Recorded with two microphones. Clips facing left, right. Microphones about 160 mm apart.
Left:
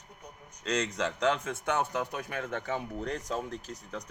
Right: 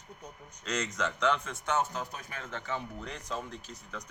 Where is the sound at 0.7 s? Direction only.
30° left (ahead or behind); by 2.8 s 55° left (ahead or behind).